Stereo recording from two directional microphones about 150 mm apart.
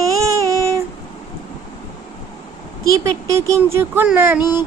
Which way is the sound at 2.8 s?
20° right (ahead or behind).